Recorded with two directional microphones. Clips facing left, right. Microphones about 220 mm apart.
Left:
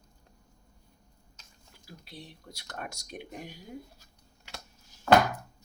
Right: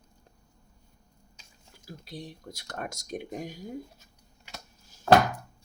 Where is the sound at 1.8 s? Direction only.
45° right (ahead or behind).